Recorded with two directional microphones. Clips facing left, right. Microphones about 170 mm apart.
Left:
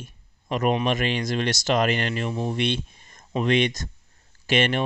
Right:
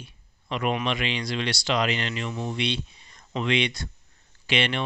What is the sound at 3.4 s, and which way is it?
Speech, 45° left (ahead or behind).